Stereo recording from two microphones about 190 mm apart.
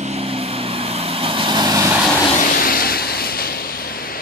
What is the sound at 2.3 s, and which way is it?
Vehicle, 45° left (ahead or behind).